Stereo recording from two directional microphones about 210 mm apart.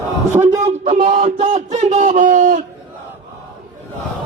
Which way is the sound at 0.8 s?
30° right (ahead or behind).